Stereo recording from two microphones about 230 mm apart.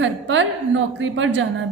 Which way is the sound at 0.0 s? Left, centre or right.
Right.